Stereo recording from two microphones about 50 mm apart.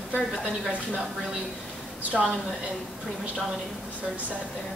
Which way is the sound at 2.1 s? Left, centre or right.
Centre.